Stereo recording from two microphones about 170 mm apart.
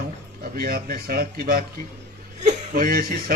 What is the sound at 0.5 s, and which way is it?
A man's voice, 60° right (ahead or behind).